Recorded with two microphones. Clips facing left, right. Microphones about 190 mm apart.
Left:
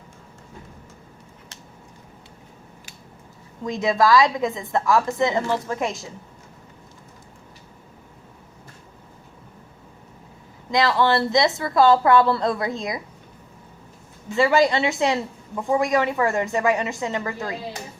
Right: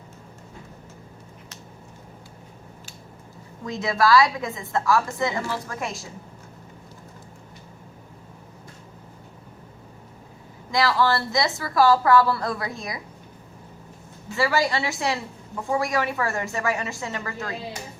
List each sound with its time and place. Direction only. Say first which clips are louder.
3.7 s a woman's voice: left 2 dB; 20° left (ahead or behind)
10.7 s a woman's voice: left 2 dB; 20° left (ahead or behind)
14.3 s a woman's voice: left 5 dB; 20° left (ahead or behind)